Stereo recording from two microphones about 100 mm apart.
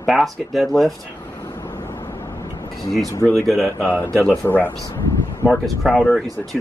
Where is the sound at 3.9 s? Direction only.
15° left (ahead or behind).